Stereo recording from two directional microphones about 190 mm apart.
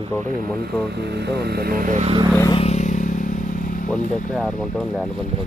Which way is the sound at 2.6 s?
35° left (ahead or behind).